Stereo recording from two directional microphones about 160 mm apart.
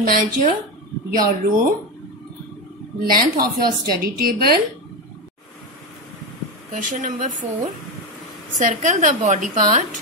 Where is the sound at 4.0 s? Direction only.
65° right (ahead or behind).